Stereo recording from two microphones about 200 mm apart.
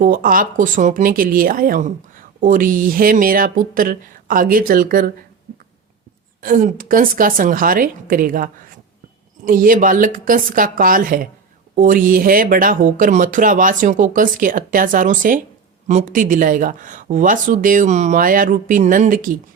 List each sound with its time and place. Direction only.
0.0 s speech: 45° right (ahead or behind)
6.4 s speech: 40° right (ahead or behind)